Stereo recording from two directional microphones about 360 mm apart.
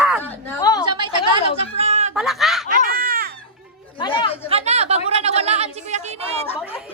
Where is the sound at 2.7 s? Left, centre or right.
Right.